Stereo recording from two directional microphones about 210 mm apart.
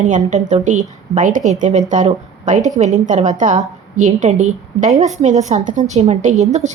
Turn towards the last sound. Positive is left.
turn(degrees=-35)  # may be behind; listen again after turning